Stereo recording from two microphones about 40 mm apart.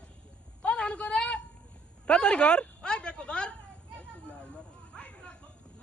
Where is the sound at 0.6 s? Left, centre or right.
Left.